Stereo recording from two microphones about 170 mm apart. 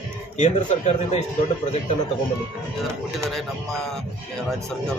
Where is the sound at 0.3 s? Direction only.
40° left (ahead or behind).